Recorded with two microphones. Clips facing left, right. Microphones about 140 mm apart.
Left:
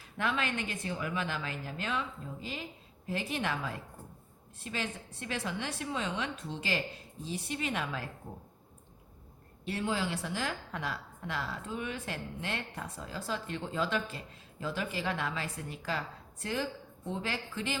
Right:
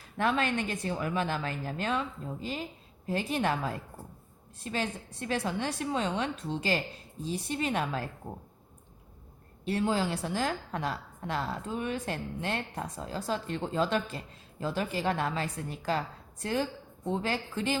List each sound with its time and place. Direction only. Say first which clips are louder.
0.2 s a woman's voice: right 5 dB; 40° right (ahead or behind)
9.6 s a woman's voice: right 5 dB; 40° right (ahead or behind)